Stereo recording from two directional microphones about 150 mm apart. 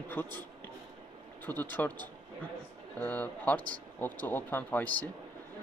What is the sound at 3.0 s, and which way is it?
Speech, 10° left (ahead or behind).